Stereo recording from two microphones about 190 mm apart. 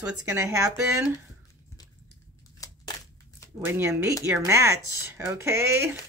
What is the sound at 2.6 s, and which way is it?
Crushing, 20° left (ahead or behind).